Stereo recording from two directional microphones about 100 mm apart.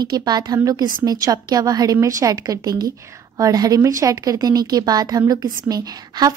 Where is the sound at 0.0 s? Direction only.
40° right (ahead or behind).